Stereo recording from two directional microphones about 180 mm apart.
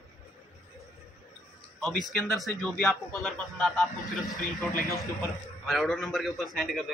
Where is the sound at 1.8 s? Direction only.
5° left (ahead or behind).